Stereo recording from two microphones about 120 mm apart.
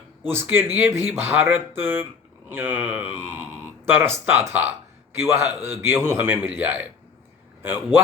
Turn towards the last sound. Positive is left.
turn(degrees=-20)  # may be behind; listen again after turning